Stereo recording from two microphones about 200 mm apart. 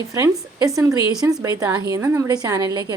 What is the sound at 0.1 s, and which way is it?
Speech, 15° right (ahead or behind).